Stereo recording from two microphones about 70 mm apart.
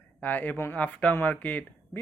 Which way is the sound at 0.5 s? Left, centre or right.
Left.